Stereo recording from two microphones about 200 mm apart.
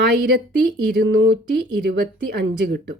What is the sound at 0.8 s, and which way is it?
Speech, 50° right (ahead or behind).